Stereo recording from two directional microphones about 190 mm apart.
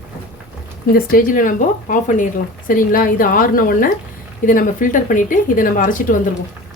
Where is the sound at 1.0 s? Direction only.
50° left (ahead or behind).